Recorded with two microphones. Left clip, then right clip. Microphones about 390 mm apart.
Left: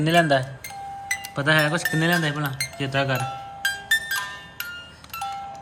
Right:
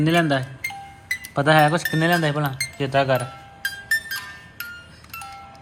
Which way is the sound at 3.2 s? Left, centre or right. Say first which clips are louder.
Left 3 dB; centre.